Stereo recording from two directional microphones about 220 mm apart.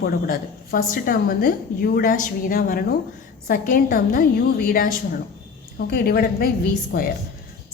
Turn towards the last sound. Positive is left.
turn(degrees=40)  # may be behind; listen again after turning